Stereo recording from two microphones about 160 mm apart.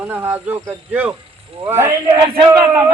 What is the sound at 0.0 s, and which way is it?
Speech, 15° right (ahead or behind).